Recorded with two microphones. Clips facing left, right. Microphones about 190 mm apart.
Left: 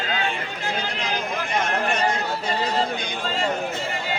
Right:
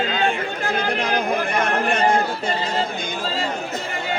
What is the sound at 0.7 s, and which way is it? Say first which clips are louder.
A man's voice: right 7 dB; 55° right (ahead or behind).